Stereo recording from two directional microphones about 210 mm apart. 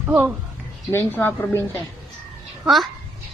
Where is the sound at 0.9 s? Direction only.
10° left (ahead or behind).